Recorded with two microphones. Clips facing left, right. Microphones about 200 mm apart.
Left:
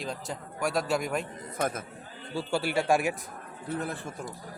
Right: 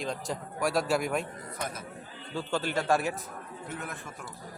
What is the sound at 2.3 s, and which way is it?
Speech, 10° left (ahead or behind).